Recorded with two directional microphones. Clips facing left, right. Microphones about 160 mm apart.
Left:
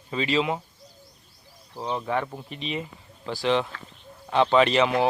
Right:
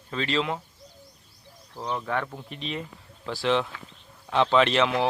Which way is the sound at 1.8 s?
15° left (ahead or behind).